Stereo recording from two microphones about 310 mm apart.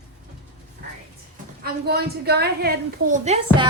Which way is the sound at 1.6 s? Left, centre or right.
Right.